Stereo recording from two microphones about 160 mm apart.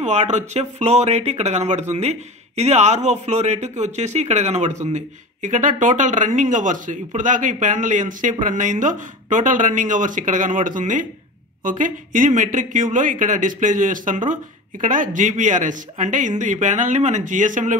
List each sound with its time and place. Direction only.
0.0 s speech: 45° right (ahead or behind)